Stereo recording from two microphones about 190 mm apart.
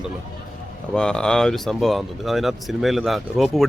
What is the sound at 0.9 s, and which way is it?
Speech, 5° left (ahead or behind).